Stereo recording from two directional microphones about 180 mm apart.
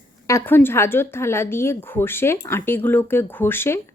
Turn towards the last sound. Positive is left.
turn(degrees=10)  # may be behind; listen again after turning